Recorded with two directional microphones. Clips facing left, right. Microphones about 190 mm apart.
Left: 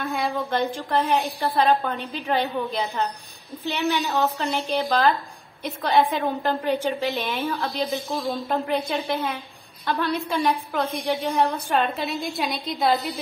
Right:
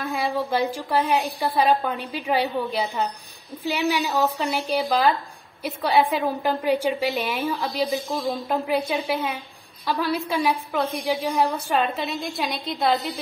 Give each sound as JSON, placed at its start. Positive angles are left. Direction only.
{"t": 0.0, "sound": "a woman's voice", "side_deg": 0}